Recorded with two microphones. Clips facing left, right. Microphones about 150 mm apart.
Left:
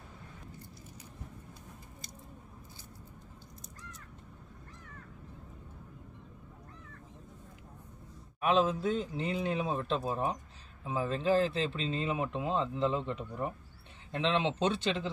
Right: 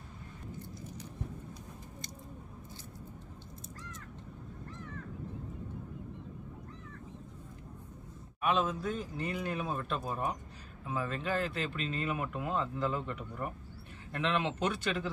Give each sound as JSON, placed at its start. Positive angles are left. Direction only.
{"t": 8.4, "sound": "speech", "side_deg": 30}